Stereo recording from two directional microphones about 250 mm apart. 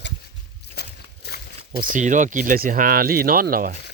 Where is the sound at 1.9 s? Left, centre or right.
Right.